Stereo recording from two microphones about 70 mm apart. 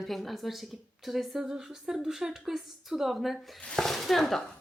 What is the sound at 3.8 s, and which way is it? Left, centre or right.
Speech, centre.